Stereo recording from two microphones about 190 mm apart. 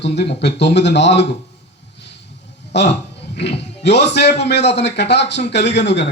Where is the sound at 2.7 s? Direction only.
65° left (ahead or behind).